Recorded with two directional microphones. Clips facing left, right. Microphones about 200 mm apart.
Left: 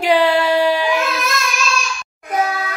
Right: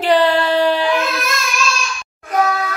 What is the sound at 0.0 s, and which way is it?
Child singing, 10° left (ahead or behind).